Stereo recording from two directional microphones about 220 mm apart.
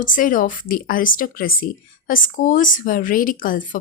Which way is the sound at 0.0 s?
35° left (ahead or behind).